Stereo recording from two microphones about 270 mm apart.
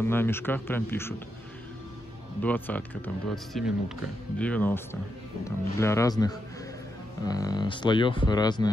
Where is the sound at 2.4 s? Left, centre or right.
Centre.